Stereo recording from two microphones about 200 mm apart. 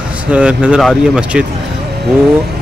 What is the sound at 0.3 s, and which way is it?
Speech, 5° right (ahead or behind).